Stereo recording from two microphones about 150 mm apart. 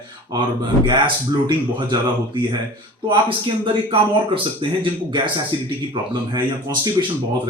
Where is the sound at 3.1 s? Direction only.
35° right (ahead or behind).